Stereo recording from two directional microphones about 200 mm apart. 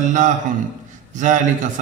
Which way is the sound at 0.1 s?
40° right (ahead or behind).